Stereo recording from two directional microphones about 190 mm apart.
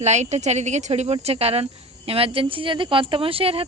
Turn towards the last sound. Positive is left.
turn(degrees=-30)  # may be behind; listen again after turning